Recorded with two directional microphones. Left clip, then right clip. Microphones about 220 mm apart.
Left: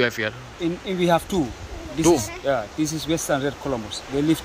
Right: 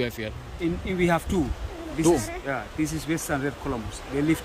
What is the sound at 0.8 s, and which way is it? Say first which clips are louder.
Speech: left 4 dB; 25° left (ahead or behind).